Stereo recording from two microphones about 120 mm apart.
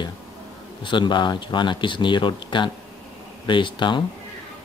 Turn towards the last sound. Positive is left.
turn(degrees=45)  # may be behind; listen again after turning